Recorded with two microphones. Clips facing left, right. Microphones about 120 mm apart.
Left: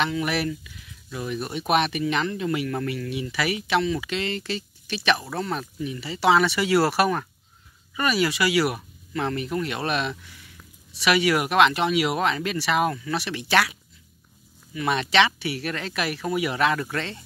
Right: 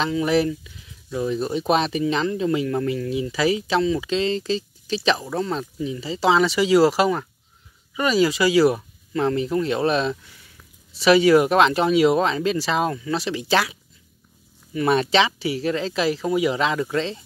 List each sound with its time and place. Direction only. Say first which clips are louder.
0.0 s speech: right 5 dB; 25° right (ahead or behind)
14.7 s speech: right 5 dB; 35° right (ahead or behind)